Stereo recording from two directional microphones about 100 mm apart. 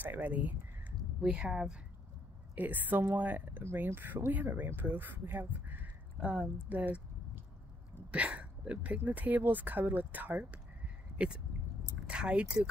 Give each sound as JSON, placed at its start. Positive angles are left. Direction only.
{"t": 0.0, "sound": "speech", "side_deg": -15}
{"t": 6.7, "sound": "a sound", "side_deg": -15}
{"t": 8.1, "sound": "speech", "side_deg": -10}